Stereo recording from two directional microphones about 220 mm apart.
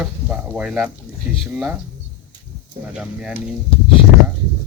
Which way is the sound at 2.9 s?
5° right (ahead or behind).